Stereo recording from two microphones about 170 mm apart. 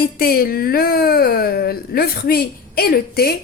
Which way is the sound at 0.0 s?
60° left (ahead or behind).